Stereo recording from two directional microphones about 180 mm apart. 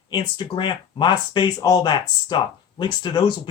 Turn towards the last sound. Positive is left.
turn(degrees=25)  # may be behind; listen again after turning